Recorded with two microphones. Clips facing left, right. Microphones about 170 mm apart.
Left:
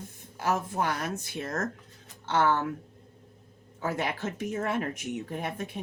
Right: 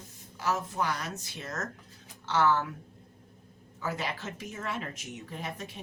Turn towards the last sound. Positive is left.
turn(degrees=55)  # may be behind; listen again after turning